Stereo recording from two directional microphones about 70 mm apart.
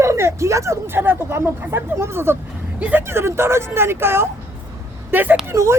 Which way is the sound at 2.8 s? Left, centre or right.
Right.